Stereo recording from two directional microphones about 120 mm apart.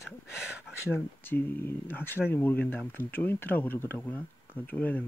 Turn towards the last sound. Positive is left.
turn(degrees=15)  # may be behind; listen again after turning